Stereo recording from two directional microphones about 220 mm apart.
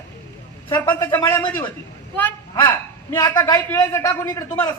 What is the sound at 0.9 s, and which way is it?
Speech, 10° left (ahead or behind).